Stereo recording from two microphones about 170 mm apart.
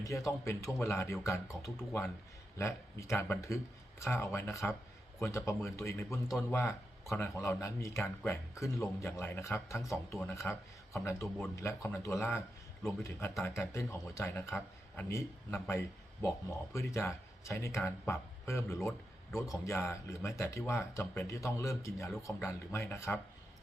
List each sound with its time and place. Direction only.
0.0 s a man's voice: 20° left (ahead or behind)